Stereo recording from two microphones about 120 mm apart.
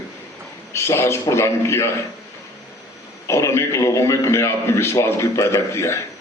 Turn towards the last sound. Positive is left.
turn(degrees=25)  # may be behind; listen again after turning